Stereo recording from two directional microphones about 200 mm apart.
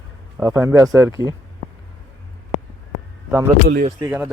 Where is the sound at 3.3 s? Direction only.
10° right (ahead or behind).